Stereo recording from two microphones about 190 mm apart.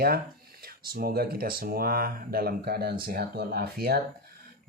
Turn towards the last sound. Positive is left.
turn(degrees=-55)  # may be behind; listen again after turning